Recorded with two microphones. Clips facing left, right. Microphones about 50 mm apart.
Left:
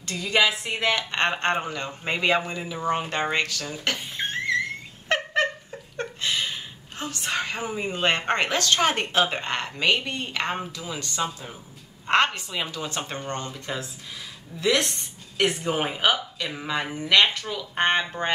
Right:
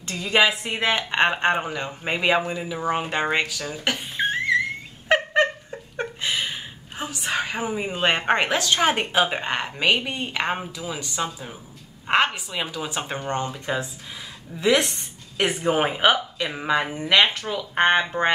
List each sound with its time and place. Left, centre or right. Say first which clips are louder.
0.0 s speech: right 2 dB; right